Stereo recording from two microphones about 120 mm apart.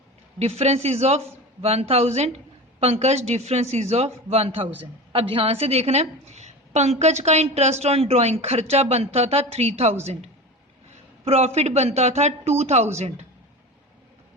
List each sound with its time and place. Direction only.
0.3 s a woman's voice: 60° right (ahead or behind)
11.3 s a woman's voice: 60° right (ahead or behind)